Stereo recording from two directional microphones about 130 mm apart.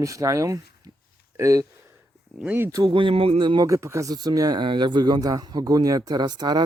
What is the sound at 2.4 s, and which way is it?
Speech, 15° right (ahead or behind).